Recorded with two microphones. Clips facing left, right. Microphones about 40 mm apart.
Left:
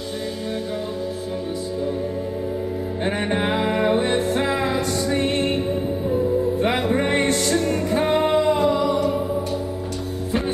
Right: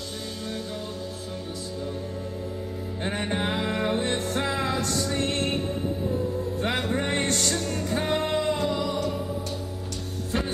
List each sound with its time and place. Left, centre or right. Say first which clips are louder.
3.0 s music: left 5 dB; left
6.6 s music: left 6 dB; left